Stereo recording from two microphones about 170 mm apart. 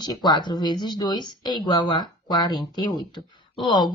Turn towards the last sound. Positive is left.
turn(degrees=25)  # may be behind; listen again after turning